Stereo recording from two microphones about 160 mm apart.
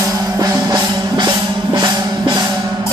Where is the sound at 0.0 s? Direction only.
20° right (ahead or behind).